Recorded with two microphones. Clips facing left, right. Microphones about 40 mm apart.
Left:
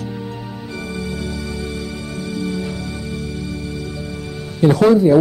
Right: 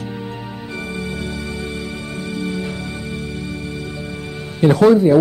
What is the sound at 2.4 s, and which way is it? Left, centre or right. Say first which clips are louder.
Music: left 1 dB; right.